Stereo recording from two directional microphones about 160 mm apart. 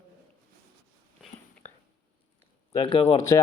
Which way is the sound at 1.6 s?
10° left (ahead or behind).